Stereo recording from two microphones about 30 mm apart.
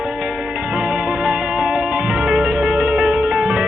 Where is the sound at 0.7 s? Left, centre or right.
Right.